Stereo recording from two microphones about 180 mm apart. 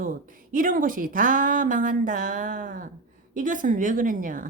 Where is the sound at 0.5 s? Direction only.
50° right (ahead or behind).